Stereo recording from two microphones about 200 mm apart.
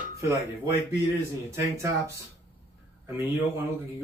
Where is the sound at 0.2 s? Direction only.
15° right (ahead or behind).